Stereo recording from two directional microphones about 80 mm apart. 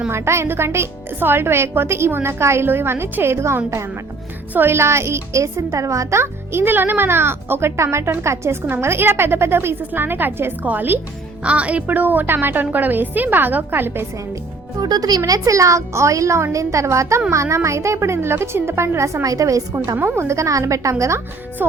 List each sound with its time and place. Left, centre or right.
0.1 s a woman's voice: right
14.8 s speech: right
15.3 s a woman's voice: right
20.0 s a woman's voice: right
21.6 s a woman's voice: right